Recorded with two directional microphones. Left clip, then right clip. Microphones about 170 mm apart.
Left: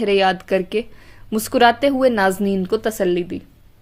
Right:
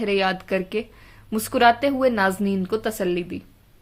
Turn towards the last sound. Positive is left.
turn(degrees=35)  # may be behind; listen again after turning